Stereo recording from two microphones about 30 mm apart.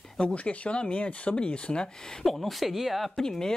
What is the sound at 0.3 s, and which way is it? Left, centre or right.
Speech, left.